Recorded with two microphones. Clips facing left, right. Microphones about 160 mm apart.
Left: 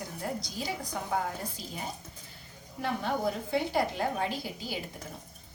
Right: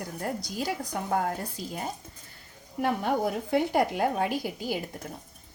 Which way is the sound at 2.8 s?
55° right (ahead or behind).